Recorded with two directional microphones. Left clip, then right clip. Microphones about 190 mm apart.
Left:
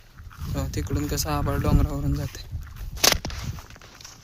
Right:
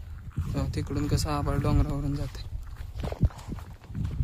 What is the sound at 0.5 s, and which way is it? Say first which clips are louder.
Speech: left 2 dB; 10° left (ahead or behind).